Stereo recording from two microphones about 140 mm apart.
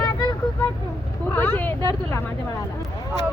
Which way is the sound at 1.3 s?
15° left (ahead or behind).